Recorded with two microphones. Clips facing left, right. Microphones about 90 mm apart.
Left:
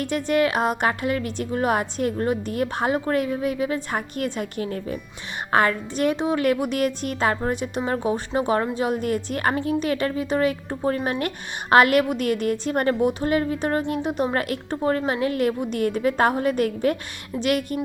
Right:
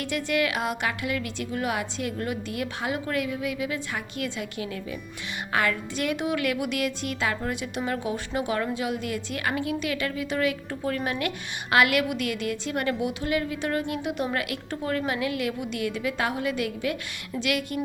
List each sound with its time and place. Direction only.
0.0 s a woman's voice: 40° left (ahead or behind)